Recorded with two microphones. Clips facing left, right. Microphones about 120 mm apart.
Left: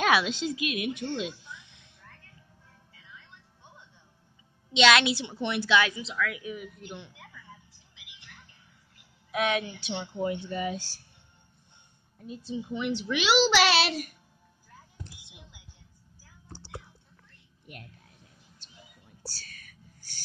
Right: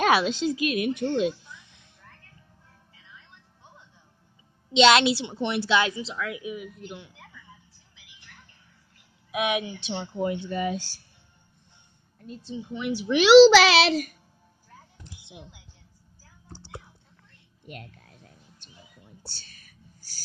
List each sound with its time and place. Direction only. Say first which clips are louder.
0.0 s a woman's voice: right 3 dB; 40° right (ahead or behind)
4.7 s a woman's voice: right 4 dB; 30° right (ahead or behind)
6.5 s speech: right 2 dB; centre (ahead or behind)
9.3 s a woman's voice: right 1 dB; 15° right (ahead or behind)
10.2 s speech: right 3 dB; 65° right (ahead or behind)
12.2 s speech: left 1 dB; 10° left (ahead or behind)
13.2 s a child's voice: right 11 dB; 85° right
17.6 s a sound: right 5 dB; 70° right (ahead or behind)
19.2 s whispering: left 3 dB; 25° right (ahead or behind)